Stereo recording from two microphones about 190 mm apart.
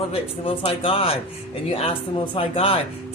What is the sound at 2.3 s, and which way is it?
Speech, 30° left (ahead or behind).